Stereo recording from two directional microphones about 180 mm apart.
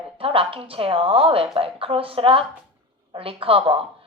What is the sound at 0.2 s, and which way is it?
A woman's voice, 30° right (ahead or behind).